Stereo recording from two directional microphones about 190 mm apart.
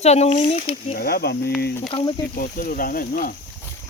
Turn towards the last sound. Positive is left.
turn(degrees=50)  # may be behind; listen again after turning